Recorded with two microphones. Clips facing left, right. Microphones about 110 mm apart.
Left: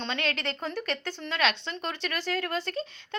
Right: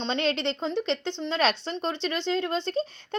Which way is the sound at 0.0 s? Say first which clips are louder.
Right 5 dB; 25° right (ahead or behind).